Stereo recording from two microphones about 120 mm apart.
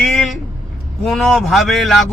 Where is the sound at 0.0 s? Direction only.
Centre (ahead or behind).